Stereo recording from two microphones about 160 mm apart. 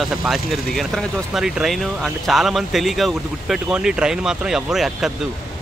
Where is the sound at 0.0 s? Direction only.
Centre (ahead or behind).